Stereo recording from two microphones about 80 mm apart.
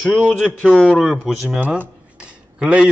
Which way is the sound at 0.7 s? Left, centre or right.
Centre.